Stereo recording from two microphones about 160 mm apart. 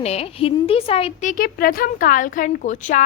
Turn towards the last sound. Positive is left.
turn(degrees=50)  # may be behind; listen again after turning